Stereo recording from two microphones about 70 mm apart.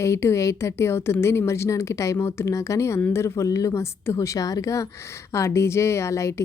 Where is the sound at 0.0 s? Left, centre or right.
Left.